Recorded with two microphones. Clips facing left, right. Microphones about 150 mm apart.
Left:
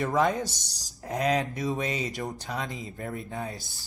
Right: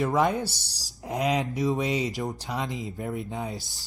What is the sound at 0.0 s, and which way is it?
Speech, 15° right (ahead or behind).